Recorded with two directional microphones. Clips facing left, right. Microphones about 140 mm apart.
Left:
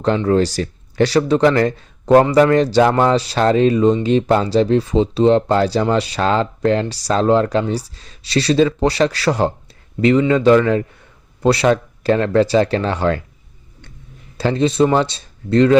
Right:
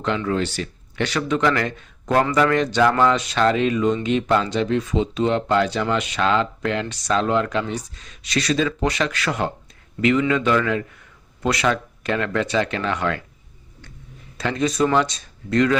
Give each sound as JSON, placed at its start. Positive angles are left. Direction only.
{"t": 0.3, "sound": "speech", "side_deg": 40}
{"t": 14.3, "sound": "speech", "side_deg": 30}